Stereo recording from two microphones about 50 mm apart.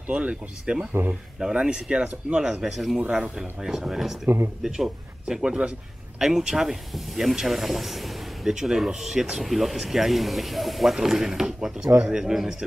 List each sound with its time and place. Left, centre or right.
0.1 s speech: right
2.3 s a man's voice: centre
3.0 s speech: right
3.3 s a man's voice: centre